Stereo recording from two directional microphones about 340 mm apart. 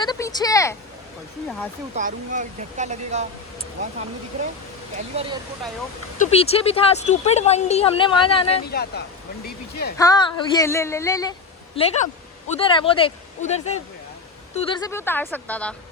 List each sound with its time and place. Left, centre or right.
0.0 s vehicle: centre
2.0 s speech: right
6.1 s speech: centre
8.6 s speech: left
10.0 s speech: centre